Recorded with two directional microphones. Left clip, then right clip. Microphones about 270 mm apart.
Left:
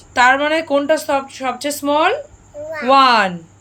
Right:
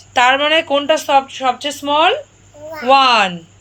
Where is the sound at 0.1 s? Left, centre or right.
Centre.